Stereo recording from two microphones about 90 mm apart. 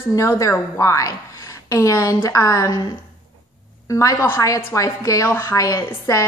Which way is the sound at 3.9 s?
35° left (ahead or behind).